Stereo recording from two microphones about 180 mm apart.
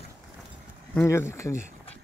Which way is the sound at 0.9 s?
15° left (ahead or behind).